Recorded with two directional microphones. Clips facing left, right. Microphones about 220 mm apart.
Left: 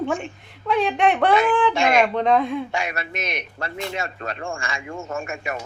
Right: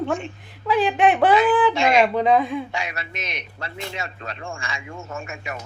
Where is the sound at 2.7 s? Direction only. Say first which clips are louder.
Left 3 dB; 50° left (ahead or behind).